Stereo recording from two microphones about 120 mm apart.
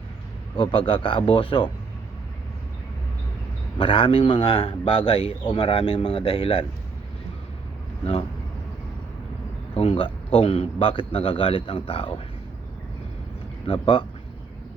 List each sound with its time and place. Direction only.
0.5 s a man's voice: 45° left (ahead or behind)
3.8 s a man's voice: 50° left (ahead or behind)
9.7 s a man's voice: 55° left (ahead or behind)
13.7 s a man's voice: 45° left (ahead or behind)